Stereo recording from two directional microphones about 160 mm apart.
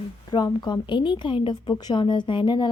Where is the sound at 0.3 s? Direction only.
25° left (ahead or behind).